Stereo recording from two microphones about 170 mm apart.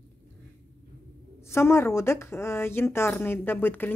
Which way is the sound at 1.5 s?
15° left (ahead or behind).